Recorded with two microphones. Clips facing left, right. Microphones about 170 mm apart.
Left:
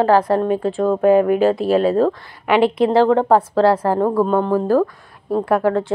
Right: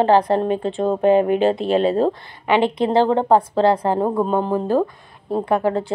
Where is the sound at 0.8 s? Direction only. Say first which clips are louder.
Left 2 dB; 20° right (ahead or behind).